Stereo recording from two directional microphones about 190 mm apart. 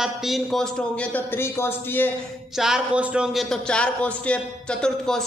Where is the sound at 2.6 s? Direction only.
5° right (ahead or behind).